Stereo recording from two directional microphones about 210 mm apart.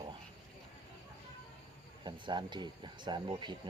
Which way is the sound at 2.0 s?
20° right (ahead or behind).